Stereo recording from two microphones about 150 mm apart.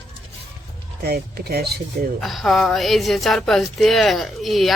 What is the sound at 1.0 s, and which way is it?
Speech, 90° right.